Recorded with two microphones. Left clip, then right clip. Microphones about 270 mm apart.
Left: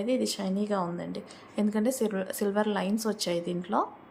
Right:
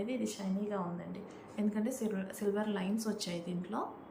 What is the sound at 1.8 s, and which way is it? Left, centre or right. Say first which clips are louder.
Speech: left 9 dB; centre.